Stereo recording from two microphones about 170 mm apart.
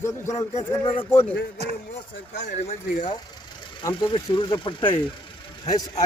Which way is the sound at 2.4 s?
40° left (ahead or behind).